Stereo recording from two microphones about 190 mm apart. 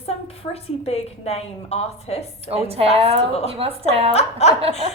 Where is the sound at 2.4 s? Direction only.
35° right (ahead or behind).